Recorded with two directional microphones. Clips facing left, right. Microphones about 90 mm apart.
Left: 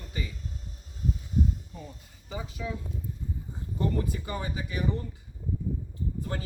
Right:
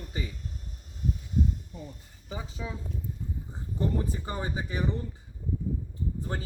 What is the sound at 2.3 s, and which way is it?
Speech, 25° right (ahead or behind).